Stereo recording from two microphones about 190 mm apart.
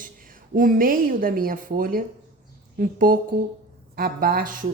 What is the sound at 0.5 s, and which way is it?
Speech, 45° right (ahead or behind).